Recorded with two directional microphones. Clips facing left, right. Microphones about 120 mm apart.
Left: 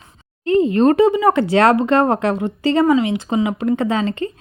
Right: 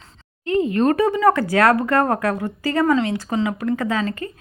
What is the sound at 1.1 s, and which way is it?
A woman's voice, 15° left (ahead or behind).